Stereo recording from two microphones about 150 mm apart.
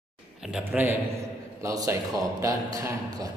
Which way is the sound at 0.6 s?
15° right (ahead or behind).